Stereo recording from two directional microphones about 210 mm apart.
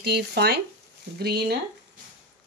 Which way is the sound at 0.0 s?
50° right (ahead or behind).